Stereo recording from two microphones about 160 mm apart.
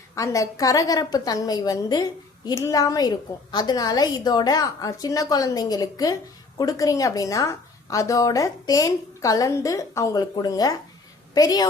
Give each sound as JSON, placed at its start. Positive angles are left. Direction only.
{"t": 0.2, "sound": "a woman's voice", "side_deg": 20}